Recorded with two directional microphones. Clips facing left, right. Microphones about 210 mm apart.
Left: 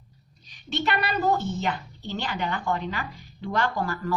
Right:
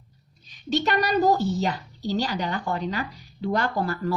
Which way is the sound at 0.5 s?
40° right (ahead or behind).